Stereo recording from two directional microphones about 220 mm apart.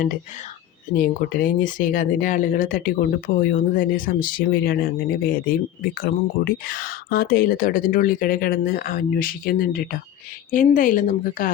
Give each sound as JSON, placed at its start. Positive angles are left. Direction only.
{"t": 0.9, "sound": "speech", "side_deg": 40}